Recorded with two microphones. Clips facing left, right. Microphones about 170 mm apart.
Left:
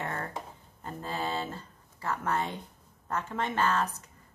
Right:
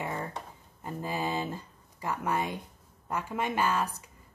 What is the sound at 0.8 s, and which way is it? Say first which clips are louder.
A woman's voice: right 2 dB; 10° right (ahead or behind).